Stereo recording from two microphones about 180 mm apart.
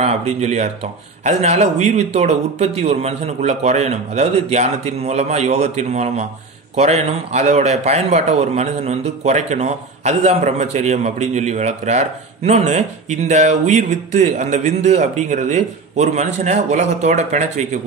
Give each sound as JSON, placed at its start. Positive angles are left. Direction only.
{"t": 0.0, "sound": "a man's voice", "side_deg": -35}